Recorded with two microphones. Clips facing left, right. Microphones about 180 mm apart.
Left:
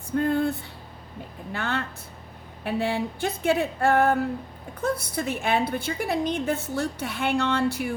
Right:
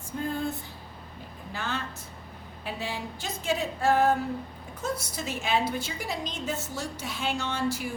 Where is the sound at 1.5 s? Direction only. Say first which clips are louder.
Left 4 dB; 60° left (ahead or behind).